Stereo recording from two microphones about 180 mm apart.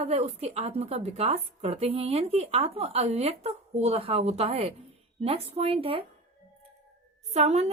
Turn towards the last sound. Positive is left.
turn(degrees=-35)  # may be behind; listen again after turning